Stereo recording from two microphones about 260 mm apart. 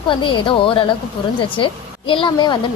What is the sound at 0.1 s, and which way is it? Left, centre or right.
A woman's voice, centre.